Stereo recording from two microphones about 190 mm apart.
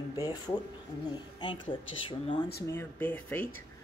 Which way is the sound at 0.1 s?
20° left (ahead or behind).